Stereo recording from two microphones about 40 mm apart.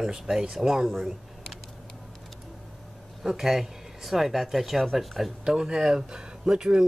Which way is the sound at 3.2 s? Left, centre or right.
Centre.